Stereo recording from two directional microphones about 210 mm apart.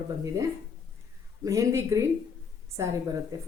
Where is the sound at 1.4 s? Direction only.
15° right (ahead or behind).